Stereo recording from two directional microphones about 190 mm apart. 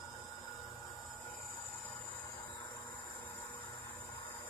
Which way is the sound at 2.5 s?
20° left (ahead or behind).